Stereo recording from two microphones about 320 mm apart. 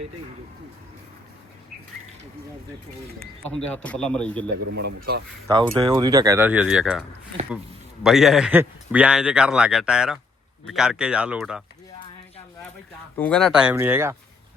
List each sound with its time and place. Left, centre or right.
3.5 s speech: centre
4.9 s speech: right
5.7 s speech: centre
8.0 s speech: centre
13.1 s speech: centre